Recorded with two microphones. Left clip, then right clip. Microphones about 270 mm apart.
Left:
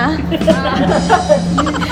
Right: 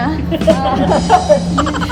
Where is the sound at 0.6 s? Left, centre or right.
Right.